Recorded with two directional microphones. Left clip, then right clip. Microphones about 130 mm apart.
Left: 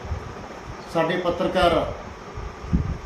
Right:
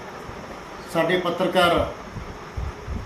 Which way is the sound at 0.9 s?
15° right (ahead or behind).